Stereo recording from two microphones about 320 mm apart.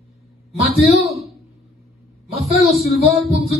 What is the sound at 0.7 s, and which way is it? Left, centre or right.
Speech, centre.